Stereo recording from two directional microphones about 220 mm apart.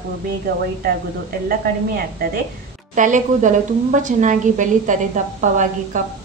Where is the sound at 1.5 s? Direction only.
40° right (ahead or behind).